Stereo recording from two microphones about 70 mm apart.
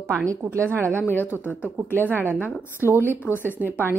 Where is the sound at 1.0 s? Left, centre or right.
Left.